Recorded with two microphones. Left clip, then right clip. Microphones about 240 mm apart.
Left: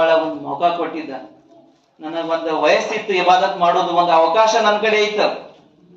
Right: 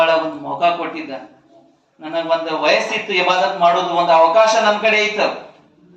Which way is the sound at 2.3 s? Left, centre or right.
Right.